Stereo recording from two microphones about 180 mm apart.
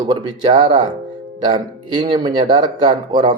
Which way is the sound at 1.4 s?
25° right (ahead or behind).